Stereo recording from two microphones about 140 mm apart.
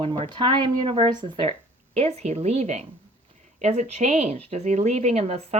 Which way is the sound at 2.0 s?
50° right (ahead or behind).